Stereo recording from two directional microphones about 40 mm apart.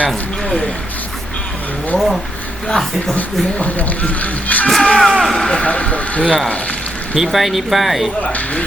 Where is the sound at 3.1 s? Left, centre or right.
Left.